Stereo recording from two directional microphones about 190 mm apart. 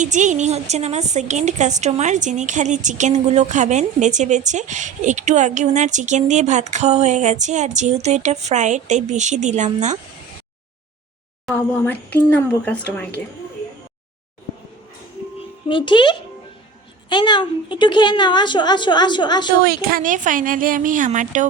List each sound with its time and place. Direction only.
0.0 s a woman's voice: 40° right (ahead or behind)
11.5 s speech: 10° left (ahead or behind)
15.4 s a woman's voice: 25° left (ahead or behind)
19.6 s speech: 50° right (ahead or behind)